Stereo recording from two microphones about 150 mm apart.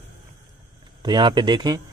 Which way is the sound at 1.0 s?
30° right (ahead or behind).